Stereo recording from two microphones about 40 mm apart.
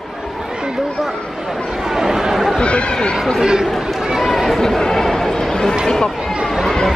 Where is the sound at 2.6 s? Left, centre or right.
Left.